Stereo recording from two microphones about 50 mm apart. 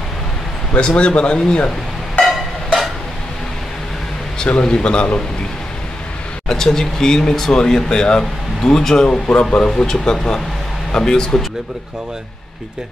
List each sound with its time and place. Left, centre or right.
0.7 s speech: centre
2.2 s percussion: centre
4.6 s speech: centre
6.5 s speech: centre